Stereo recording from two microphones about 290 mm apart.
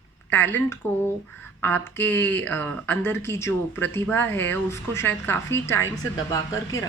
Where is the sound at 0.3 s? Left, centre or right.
Centre.